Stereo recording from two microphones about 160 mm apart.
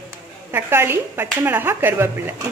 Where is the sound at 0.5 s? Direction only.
15° right (ahead or behind).